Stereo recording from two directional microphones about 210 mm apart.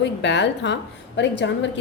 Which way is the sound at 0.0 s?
55° left (ahead or behind).